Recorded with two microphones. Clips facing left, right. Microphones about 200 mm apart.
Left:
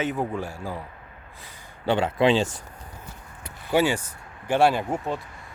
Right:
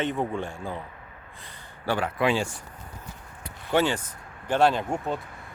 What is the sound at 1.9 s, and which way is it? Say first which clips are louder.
Speech: left 4 dB; 25° left (ahead or behind).